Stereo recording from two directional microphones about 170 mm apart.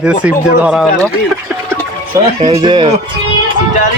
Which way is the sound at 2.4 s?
30° right (ahead or behind).